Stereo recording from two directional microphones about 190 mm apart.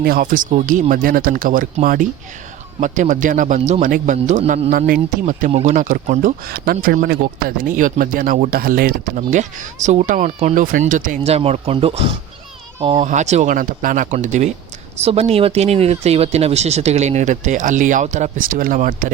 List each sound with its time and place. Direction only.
0.0 s speech: 50° right (ahead or behind)